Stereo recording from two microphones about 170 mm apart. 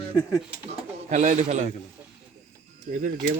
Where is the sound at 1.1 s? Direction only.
45° right (ahead or behind).